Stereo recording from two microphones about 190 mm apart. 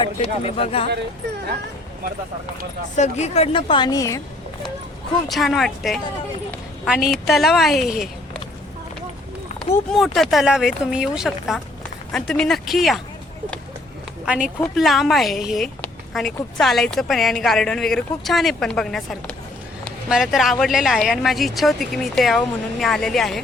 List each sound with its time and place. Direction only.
0.0 s speech: 30° left (ahead or behind)
2.9 s a woman's voice: 35° left (ahead or behind); by 4.2 s 15° left (ahead or behind)
5.3 s a woman's voice: centre (ahead or behind)
9.9 s speech: centre (ahead or behind)
14.3 s speech: 5° right (ahead or behind)